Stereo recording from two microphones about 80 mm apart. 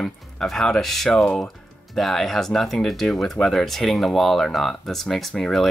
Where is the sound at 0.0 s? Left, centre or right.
Centre.